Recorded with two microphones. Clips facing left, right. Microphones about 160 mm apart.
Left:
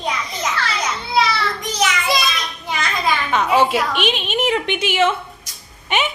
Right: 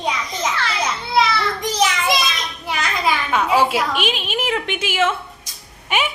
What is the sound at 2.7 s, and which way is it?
A child's voice, 5° right (ahead or behind).